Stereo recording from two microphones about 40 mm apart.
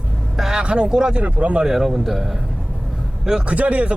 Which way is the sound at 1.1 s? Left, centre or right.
Right.